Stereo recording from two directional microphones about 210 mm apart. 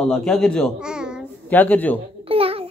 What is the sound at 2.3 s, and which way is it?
Babbling, 25° right (ahead or behind).